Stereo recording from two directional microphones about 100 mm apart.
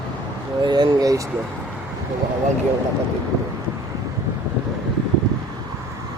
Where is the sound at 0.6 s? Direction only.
45° right (ahead or behind).